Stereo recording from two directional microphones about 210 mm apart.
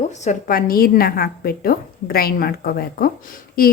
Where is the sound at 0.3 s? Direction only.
40° left (ahead or behind).